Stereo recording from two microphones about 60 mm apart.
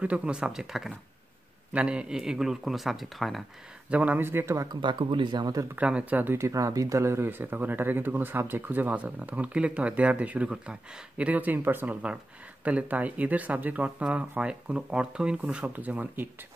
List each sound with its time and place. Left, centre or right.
0.0 s speech: centre
1.7 s speech: centre
3.9 s speech: right
4.2 s speech: right
5.8 s speech: right
6.3 s speech: right
7.2 s speech: right
10.5 s speech: centre
11.2 s speech: right
15.7 s speech: right